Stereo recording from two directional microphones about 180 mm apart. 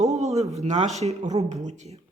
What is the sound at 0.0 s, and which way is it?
Speech, 35° right (ahead or behind).